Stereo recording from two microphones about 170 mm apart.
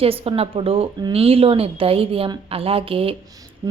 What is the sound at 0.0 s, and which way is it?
A woman's voice, 35° right (ahead or behind).